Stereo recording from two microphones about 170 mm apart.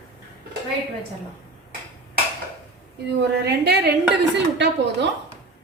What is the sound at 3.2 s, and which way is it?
A woman's voice, 80° right.